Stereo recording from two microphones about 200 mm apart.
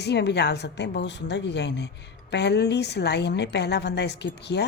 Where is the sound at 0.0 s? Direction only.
55° left (ahead or behind).